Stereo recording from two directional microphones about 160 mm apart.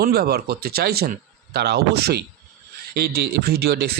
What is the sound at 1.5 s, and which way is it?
Speech, 90° right.